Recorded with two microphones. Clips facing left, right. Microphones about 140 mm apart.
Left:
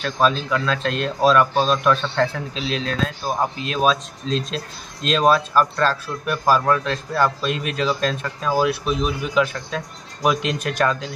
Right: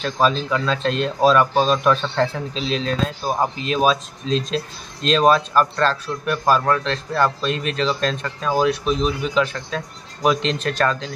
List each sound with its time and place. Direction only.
0.0 s a man's voice: centre (ahead or behind)